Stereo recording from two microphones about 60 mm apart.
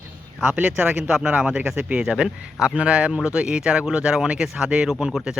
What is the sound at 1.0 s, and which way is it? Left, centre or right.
Speech, centre.